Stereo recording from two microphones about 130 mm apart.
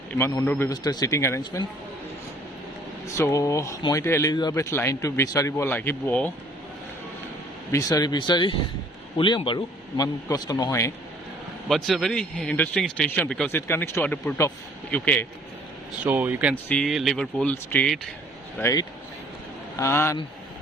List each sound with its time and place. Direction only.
0.1 s speech: 20° left (ahead or behind)
0.7 s speech: 30° left (ahead or behind)
3.1 s speech: 25° left (ahead or behind)
7.7 s a man's voice: 25° left (ahead or behind)
10.2 s speech: 30° left (ahead or behind)
11.7 s speech: centre (ahead or behind)
13.6 s speech: 20° left (ahead or behind)
16.0 s speech: 15° right (ahead or behind)
16.6 s speech: 10° left (ahead or behind)
18.6 s speech: 25° left (ahead or behind)